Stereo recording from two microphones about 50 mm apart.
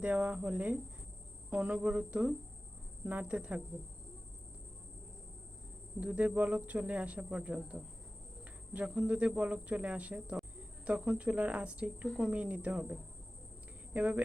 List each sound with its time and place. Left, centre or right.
0.0 s speech: right
6.0 s cricket: right
6.6 s speech: right
8.7 s speech: centre
13.9 s speech: right